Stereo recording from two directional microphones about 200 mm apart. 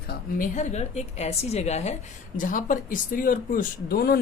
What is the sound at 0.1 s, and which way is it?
A woman's voice, 40° left (ahead or behind).